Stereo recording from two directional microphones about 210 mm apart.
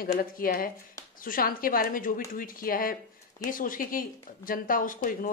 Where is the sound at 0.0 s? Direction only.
45° left (ahead or behind).